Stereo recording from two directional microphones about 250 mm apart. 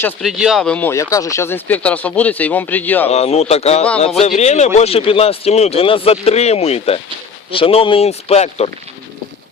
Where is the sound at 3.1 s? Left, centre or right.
Left.